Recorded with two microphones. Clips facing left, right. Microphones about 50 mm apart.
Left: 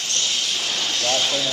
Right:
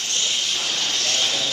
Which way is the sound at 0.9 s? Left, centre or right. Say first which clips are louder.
Left 4 dB; centre.